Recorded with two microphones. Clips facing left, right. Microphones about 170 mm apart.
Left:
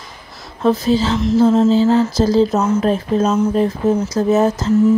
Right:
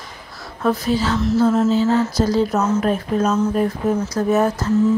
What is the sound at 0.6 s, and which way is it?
Speech, 25° left (ahead or behind).